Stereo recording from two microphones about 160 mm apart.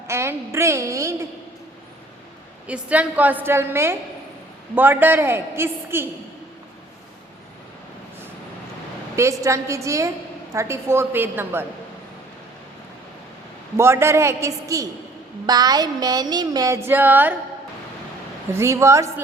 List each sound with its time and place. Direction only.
0.1 s a man's voice: 15° right (ahead or behind)
2.6 s a man's voice: 10° right (ahead or behind)
9.1 s a sound: 20° right (ahead or behind)
10.5 s a man's voice: 15° right (ahead or behind)
13.7 s a man's voice: 15° right (ahead or behind)
15.4 s a sound: 25° right (ahead or behind)
18.5 s a man's voice: 15° right (ahead or behind)